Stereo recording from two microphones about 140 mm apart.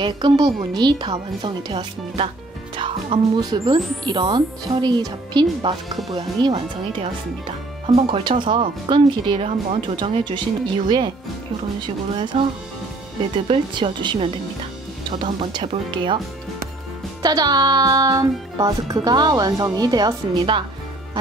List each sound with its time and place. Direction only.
0.0 s speech: 30° right (ahead or behind)
12.2 s speech: 35° right (ahead or behind)
13.5 s speech: 35° right (ahead or behind)
17.2 s speech: 25° right (ahead or behind)